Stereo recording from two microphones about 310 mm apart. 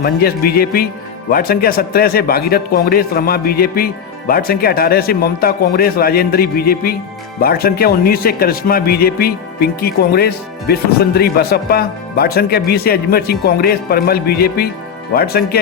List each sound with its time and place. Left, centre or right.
0.0 s a man's voice: left